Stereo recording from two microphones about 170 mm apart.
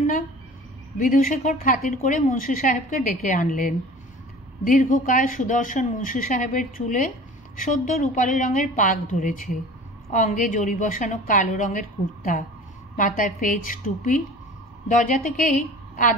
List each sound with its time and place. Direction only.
0.9 s a woman's voice: 55° left (ahead or behind)
12.9 s a woman's voice: 55° left (ahead or behind)